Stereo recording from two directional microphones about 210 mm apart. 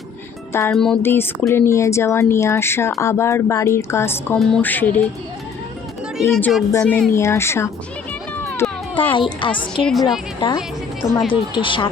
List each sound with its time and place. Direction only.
0.7 s speech: centre (ahead or behind)
6.1 s speech: centre (ahead or behind)
6.7 s speech: 10° left (ahead or behind)
8.6 s a sound: 10° left (ahead or behind)
9.1 s speech: 25° left (ahead or behind)
9.8 s speech: centre (ahead or behind)
11.3 s speech: 25° left (ahead or behind)